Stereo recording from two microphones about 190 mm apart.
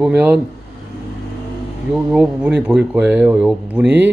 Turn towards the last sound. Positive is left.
turn(degrees=-10)  # may be behind; listen again after turning